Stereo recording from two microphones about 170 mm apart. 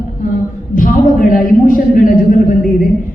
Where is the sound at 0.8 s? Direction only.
55° left (ahead or behind).